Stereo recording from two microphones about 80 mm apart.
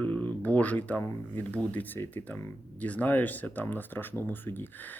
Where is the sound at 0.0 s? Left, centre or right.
Centre.